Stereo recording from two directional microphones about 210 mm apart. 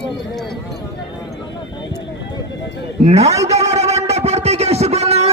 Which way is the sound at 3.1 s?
30° right (ahead or behind).